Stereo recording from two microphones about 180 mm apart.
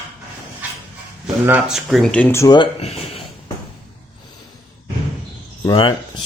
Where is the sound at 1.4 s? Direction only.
5° right (ahead or behind); by 3.2 s 35° left (ahead or behind).